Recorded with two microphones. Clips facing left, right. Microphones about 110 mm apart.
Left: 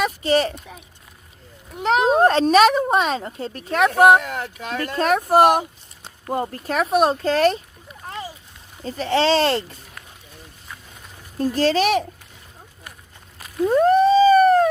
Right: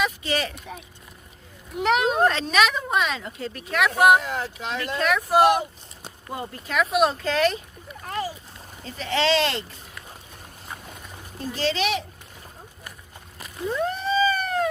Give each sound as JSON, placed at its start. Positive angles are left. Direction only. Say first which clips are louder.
{"t": 0.0, "sound": "a sound", "louder": "left 6 dB", "side_deg": 40}
{"t": 1.8, "sound": "speech", "louder": "left 4 dB", "side_deg": 35}
{"t": 4.4, "sound": "speech", "louder": "left 2 dB", "side_deg": 50}
{"t": 8.8, "sound": "speech", "louder": "left 5 dB", "side_deg": 35}
{"t": 11.3, "sound": "speech", "louder": "left 7 dB", "side_deg": 45}
{"t": 13.7, "sound": "a sound", "louder": "left 11 dB", "side_deg": 50}